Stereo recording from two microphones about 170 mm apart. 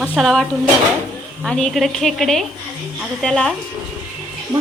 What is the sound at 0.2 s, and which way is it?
Speech, centre (ahead or behind).